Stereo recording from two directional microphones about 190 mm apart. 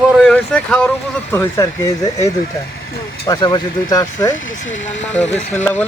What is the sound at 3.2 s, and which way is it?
Speech, 20° left (ahead or behind).